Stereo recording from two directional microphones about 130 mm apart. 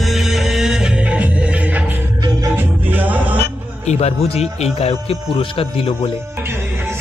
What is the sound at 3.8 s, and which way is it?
Speech, 55° left (ahead or behind).